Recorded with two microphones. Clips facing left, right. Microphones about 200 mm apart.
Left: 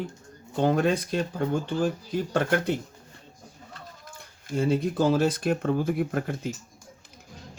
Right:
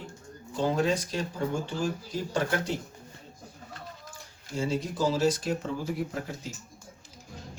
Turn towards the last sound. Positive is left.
turn(degrees=60)  # may be behind; listen again after turning